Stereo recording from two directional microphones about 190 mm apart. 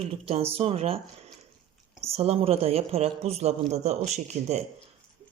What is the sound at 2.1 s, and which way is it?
A woman's voice, 30° right (ahead or behind).